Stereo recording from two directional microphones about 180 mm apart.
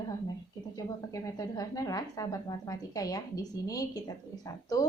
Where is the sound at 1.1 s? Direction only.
20° left (ahead or behind).